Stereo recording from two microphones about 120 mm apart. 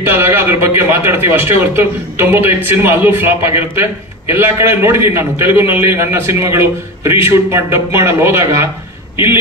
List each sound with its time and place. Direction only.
0.0 s speech: 20° right (ahead or behind)